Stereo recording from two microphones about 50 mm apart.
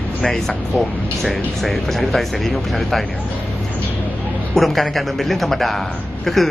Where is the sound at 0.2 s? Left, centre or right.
Centre.